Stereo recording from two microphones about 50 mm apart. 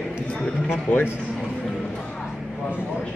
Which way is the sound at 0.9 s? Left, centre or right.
Left.